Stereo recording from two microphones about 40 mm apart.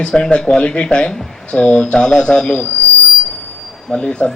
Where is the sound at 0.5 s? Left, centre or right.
Left.